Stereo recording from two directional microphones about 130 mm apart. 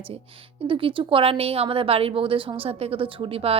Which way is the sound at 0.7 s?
40° right (ahead or behind).